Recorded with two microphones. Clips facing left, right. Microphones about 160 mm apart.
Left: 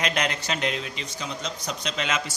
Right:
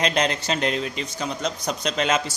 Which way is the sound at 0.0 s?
30° right (ahead or behind).